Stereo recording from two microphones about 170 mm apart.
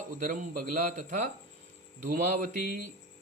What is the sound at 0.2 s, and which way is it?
A man's voice, 50° right (ahead or behind).